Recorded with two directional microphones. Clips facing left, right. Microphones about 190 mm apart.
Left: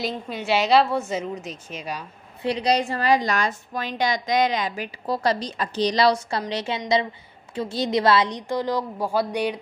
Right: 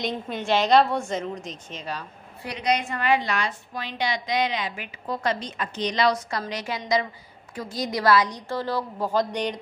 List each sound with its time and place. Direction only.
0.0 s a woman's voice: 5° left (ahead or behind)
2.4 s a woman's voice: 30° left (ahead or behind); by 9.6 s 10° left (ahead or behind)